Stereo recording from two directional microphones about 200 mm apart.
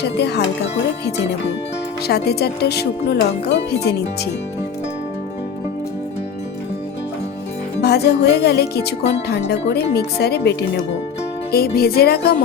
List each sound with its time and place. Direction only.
0.0 s speech: 55° left (ahead or behind)
2.0 s speech: 55° left (ahead or behind)
7.8 s speech: 55° left (ahead or behind)
11.5 s music: 50° left (ahead or behind)